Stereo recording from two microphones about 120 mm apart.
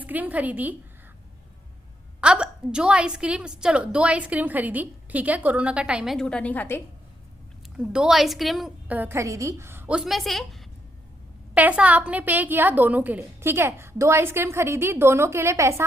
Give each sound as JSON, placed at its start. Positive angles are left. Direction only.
{"t": 0.0, "sound": "a woman's voice", "side_deg": -15}
{"t": 2.2, "sound": "a woman's voice", "side_deg": -10}
{"t": 6.1, "sound": "a woman's voice", "side_deg": 10}
{"t": 7.8, "sound": "a woman's voice", "side_deg": -5}
{"t": 8.9, "sound": "a woman's voice", "side_deg": -15}
{"t": 10.0, "sound": "a woman's voice", "side_deg": 0}
{"t": 11.5, "sound": "a woman's voice", "side_deg": -10}